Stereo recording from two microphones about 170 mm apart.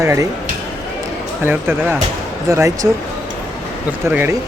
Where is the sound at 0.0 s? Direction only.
15° right (ahead or behind).